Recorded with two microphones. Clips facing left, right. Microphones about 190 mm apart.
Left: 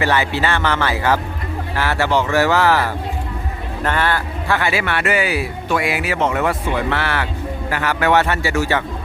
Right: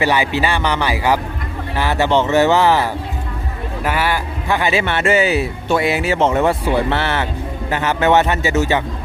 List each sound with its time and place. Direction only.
0.0 s a man's voice: 15° right (ahead or behind)